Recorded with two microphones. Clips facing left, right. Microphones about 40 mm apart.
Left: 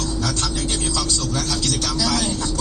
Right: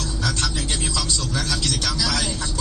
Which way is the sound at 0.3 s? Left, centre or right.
Right.